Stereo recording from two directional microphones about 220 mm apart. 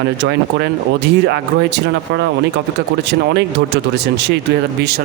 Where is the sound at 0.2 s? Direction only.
50° right (ahead or behind).